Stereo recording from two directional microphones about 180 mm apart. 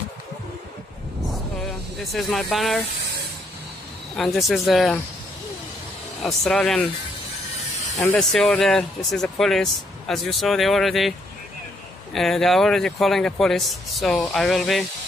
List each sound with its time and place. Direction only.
1.7 s speech: centre (ahead or behind)
4.2 s speech: centre (ahead or behind)
6.2 s speech: centre (ahead or behind)
8.1 s speech: centre (ahead or behind)